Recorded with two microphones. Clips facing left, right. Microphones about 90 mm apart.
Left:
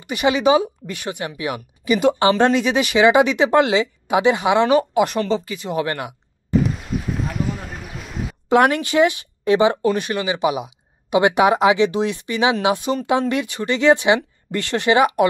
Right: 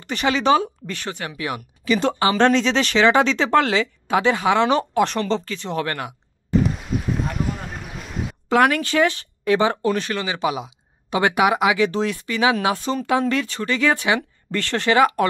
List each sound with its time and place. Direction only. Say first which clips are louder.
0.0 s speech: left 3 dB; 10° left (ahead or behind)
4.6 s speech: left 2 dB; 5° left (ahead or behind)
6.5 s a sound: left 1 dB; centre (ahead or behind)
8.5 s speech: left 2 dB; 25° left (ahead or behind)